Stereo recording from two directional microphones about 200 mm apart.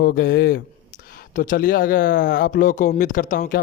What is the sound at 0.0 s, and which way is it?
Speech, 50° left (ahead or behind).